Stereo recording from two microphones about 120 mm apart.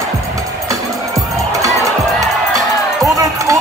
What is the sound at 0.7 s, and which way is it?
Music, 25° right (ahead or behind).